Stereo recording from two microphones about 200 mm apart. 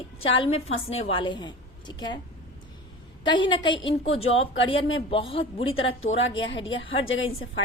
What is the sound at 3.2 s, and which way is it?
A woman's voice, 25° left (ahead or behind).